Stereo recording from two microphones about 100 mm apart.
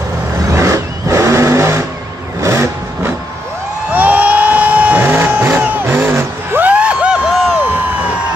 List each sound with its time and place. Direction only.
0.5 s vehicle: 30° right (ahead or behind)
3.9 s a sound: 15° right (ahead or behind)
7.6 s crowd: 20° right (ahead or behind)